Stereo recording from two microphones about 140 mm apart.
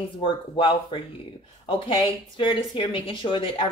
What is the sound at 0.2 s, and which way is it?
Speech, 40° left (ahead or behind).